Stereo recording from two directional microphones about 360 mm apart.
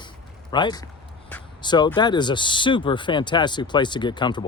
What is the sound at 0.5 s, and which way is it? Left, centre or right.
Speech, centre.